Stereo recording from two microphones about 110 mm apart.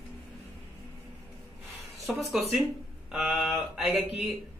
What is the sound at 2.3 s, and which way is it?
Speech, 5° right (ahead or behind).